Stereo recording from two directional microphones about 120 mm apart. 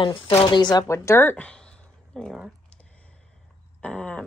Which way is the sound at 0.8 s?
25° left (ahead or behind).